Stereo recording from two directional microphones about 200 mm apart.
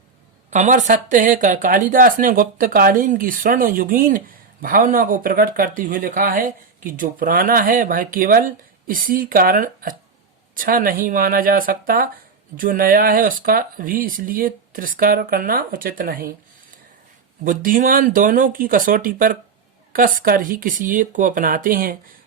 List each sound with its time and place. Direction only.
0.5 s speech: 35° right (ahead or behind)
17.4 s speech: 45° right (ahead or behind)